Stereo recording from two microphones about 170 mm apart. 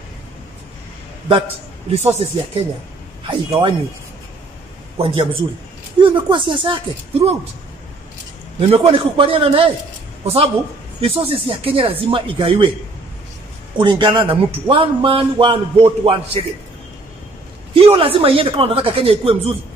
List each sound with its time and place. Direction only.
1.3 s a man's voice: 35° right (ahead or behind)
3.3 s a man's voice: 30° right (ahead or behind)
4.9 s a man's voice: 35° right (ahead or behind)
8.5 s speech: 35° right (ahead or behind)
11.0 s speech: 35° right (ahead or behind)
13.7 s a man's voice: 30° right (ahead or behind)
17.7 s speech: 30° right (ahead or behind)